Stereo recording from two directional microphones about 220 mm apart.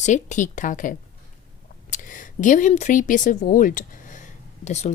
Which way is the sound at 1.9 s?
35° left (ahead or behind).